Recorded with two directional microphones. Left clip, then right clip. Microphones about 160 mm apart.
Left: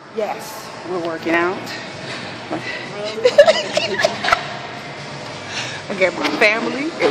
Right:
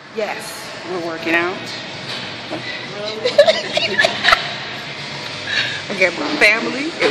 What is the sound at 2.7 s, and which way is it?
Speech, 35° left (ahead or behind).